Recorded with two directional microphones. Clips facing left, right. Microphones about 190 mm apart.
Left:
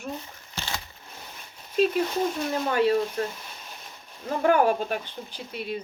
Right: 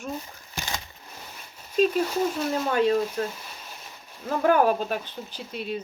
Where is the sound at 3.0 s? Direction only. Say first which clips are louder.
Even; 5° right (ahead or behind).